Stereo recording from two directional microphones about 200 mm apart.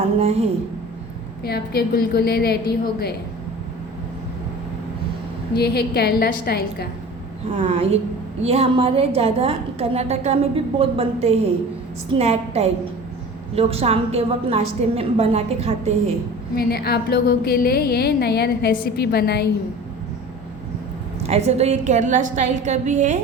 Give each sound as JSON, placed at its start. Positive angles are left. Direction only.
{"t": 0.2, "sound": "a woman's voice", "side_deg": -30}
{"t": 1.5, "sound": "a woman's voice", "side_deg": 50}
{"t": 5.5, "sound": "a woman's voice", "side_deg": 50}
{"t": 7.5, "sound": "a woman's voice", "side_deg": -30}
{"t": 16.6, "sound": "a woman's voice", "side_deg": 50}
{"t": 21.2, "sound": "a woman's voice", "side_deg": -30}